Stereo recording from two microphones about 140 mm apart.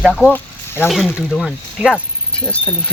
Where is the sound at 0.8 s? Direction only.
Centre (ahead or behind).